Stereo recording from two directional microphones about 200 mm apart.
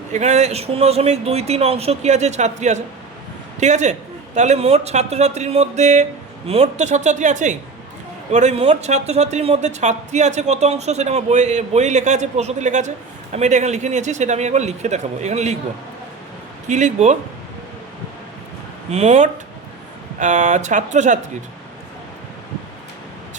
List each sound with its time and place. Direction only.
0.1 s speech: 35° right (ahead or behind)
16.6 s speech: 35° right (ahead or behind)
18.9 s speech: 35° right (ahead or behind)